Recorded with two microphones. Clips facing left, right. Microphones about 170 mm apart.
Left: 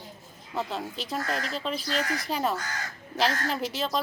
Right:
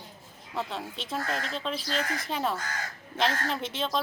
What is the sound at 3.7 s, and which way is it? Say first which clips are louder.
Speech: left 1 dB; 5° left (ahead or behind).